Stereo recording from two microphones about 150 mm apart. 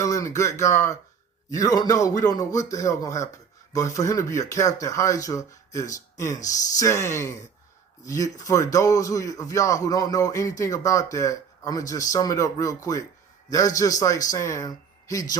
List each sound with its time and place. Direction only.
0.0 s a man's voice: 20° left (ahead or behind)